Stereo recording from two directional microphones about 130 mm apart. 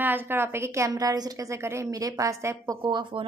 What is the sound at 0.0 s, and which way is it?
A woman's voice, 15° right (ahead or behind).